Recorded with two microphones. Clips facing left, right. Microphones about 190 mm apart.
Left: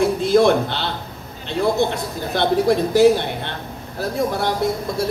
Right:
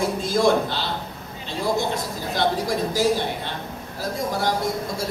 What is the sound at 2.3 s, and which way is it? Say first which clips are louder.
Speech: left 6 dB; 60° left (ahead or behind).